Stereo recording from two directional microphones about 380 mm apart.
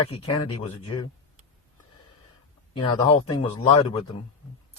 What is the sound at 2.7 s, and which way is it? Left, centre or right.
Speech, centre.